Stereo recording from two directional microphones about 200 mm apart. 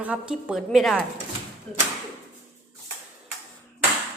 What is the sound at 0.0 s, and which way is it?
A woman's voice, 5° right (ahead or behind).